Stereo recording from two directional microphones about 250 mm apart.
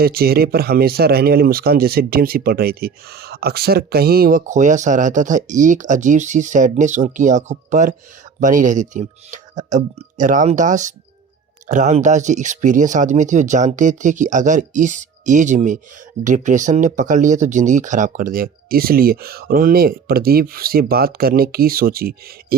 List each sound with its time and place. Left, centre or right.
0.0 s speech: right